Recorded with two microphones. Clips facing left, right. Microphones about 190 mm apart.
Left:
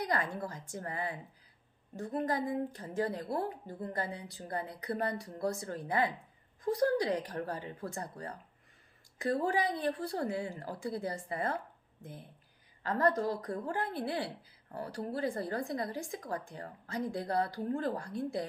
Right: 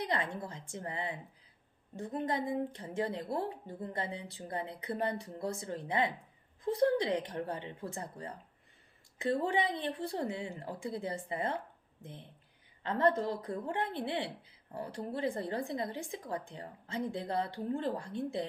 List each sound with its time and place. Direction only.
0.0 s a woman's voice: 25° right (ahead or behind)
2.2 s speech: 25° right (ahead or behind)
12.8 s speech: 25° right (ahead or behind)